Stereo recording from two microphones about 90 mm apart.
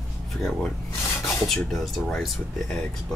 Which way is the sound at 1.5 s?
5° left (ahead or behind).